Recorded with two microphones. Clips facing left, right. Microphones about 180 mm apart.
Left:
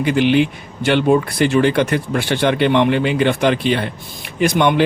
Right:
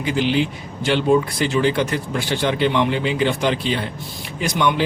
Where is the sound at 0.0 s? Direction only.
60° left (ahead or behind).